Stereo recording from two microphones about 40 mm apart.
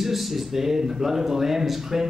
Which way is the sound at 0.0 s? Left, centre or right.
Centre.